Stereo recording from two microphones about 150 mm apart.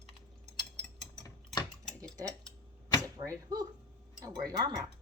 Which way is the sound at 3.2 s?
20° right (ahead or behind).